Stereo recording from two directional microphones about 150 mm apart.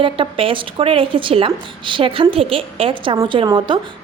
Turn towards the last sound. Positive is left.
turn(degrees=-30)  # may be behind; listen again after turning